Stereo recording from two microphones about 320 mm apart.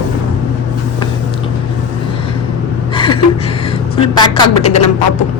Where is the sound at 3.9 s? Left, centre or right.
Centre.